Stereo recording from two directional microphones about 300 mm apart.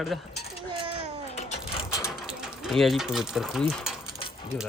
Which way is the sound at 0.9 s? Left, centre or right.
Left.